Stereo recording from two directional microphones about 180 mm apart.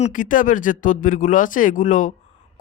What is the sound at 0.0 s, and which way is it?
Speech, 45° left (ahead or behind).